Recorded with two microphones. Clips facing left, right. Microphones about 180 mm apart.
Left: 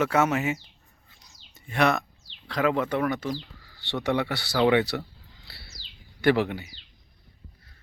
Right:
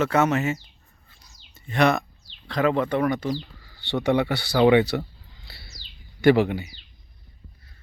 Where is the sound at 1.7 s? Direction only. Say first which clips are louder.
Right 3 dB; centre (ahead or behind).